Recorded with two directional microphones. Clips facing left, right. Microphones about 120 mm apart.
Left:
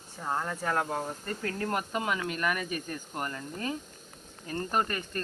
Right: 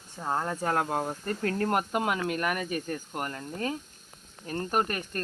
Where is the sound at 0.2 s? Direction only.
25° right (ahead or behind).